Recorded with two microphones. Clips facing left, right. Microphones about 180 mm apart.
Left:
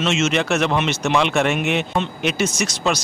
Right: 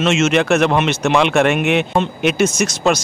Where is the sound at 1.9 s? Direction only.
50° right (ahead or behind).